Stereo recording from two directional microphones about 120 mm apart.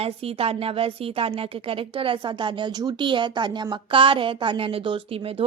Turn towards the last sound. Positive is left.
turn(degrees=-50)  # may be behind; listen again after turning